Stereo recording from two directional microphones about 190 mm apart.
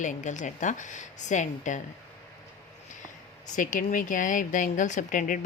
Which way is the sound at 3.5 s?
45° left (ahead or behind).